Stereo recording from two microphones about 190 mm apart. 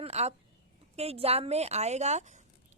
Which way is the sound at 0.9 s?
30° right (ahead or behind).